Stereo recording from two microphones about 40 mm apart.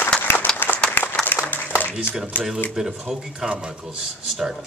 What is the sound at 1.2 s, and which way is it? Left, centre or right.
Applause, left.